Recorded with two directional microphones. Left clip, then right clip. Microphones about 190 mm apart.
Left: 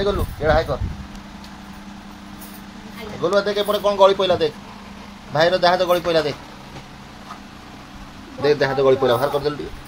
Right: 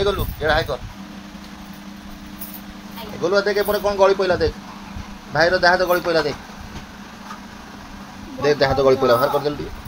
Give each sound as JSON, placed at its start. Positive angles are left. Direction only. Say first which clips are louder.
{"t": 0.0, "sound": "speech", "louder": "even", "side_deg": 0}
{"t": 3.2, "sound": "speech", "louder": "right 1 dB", "side_deg": 5}
{"t": 8.4, "sound": "speech", "louder": "right 1 dB", "side_deg": 0}